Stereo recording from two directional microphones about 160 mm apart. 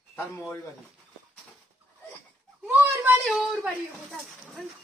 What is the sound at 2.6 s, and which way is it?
Speech, 10° right (ahead or behind).